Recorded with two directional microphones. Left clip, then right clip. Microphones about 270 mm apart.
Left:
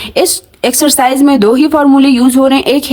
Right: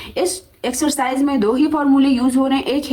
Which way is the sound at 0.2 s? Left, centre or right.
Left.